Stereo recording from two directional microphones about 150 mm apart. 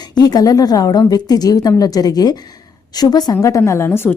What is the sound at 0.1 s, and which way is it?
A woman's voice, 25° left (ahead or behind).